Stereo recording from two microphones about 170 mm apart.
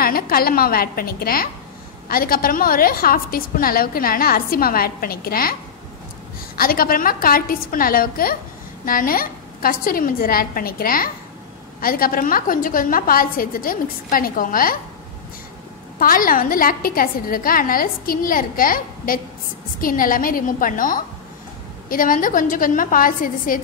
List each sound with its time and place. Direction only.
0.0 s a woman's voice: 60° left (ahead or behind)
16.0 s a woman's voice: 55° left (ahead or behind)